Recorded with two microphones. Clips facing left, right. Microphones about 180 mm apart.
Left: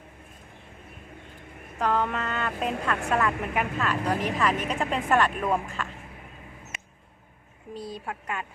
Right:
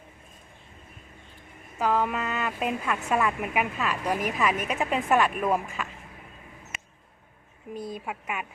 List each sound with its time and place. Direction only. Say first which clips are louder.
1.8 s a woman's voice: right 1 dB; 5° right (ahead or behind)
7.8 s a woman's voice: right 2 dB; 50° right (ahead or behind)
8.0 s a woman's voice: even; 10° right (ahead or behind)